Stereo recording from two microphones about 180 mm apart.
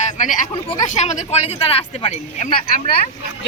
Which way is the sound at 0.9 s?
35° left (ahead or behind).